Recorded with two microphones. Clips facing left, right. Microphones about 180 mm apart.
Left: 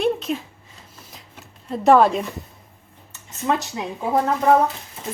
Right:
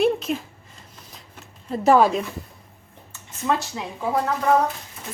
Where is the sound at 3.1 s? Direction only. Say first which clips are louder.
Left 1 dB; 20° left (ahead or behind).